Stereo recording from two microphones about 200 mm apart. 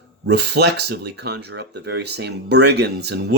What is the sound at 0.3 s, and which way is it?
Speech, 55° right (ahead or behind).